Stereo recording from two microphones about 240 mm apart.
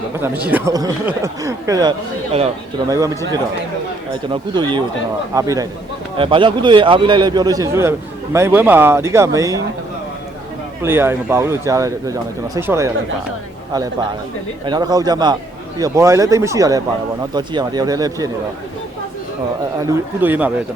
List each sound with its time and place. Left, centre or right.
0.2 s a man's voice: centre
10.8 s a man's voice: centre
14.6 s a man's voice: centre
19.8 s a man's voice: centre